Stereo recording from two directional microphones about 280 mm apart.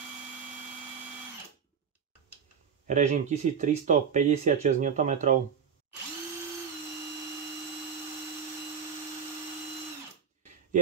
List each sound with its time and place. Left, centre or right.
2.9 s speech: right